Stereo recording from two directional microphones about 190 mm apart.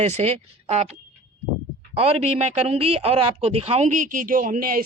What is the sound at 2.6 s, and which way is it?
Speech, 30° right (ahead or behind).